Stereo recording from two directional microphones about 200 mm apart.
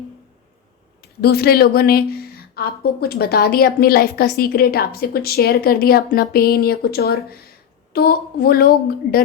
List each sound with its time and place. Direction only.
1.2 s a woman's voice: 50° left (ahead or behind)